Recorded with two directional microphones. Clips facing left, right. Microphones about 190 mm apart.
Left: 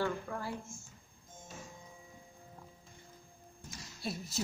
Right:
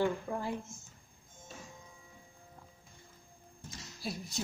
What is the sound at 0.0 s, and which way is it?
Speech, 20° right (ahead or behind).